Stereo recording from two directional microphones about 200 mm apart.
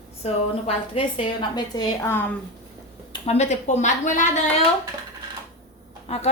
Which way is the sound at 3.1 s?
35° left (ahead or behind).